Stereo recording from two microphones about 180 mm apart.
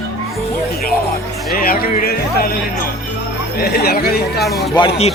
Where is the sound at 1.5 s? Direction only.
55° left (ahead or behind).